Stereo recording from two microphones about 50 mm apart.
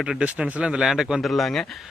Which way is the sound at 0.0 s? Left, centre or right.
Centre.